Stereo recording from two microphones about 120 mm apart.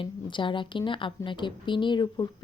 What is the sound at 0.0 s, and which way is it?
Speech, 45° left (ahead or behind).